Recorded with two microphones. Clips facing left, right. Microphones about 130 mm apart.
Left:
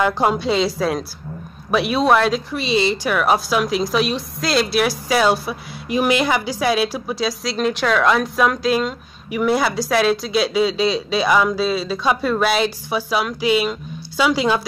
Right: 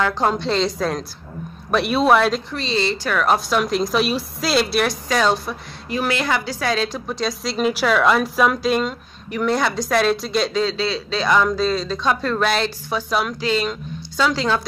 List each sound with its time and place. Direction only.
0.0 s a woman's voice: 10° left (ahead or behind)
2.6 s a woman's voice: 15° left (ahead or behind)